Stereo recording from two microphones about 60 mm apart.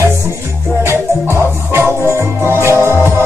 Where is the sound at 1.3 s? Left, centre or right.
Right.